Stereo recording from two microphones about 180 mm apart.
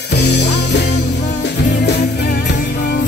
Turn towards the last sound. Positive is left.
turn(degrees=55)  # may be behind; listen again after turning